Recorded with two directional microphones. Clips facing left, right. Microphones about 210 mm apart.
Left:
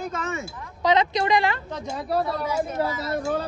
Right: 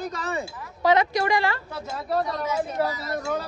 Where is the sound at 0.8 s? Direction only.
20° left (ahead or behind).